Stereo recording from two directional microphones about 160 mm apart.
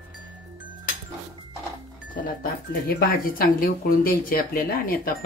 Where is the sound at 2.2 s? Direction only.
65° left (ahead or behind).